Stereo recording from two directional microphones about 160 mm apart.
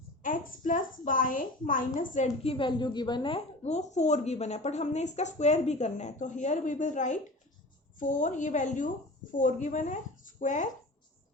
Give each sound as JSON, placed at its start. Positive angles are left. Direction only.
{"t": 0.2, "sound": "a woman's voice", "side_deg": 55}
{"t": 2.5, "sound": "a woman's voice", "side_deg": 30}